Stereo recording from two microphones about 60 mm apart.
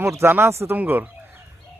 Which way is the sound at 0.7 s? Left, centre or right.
Right.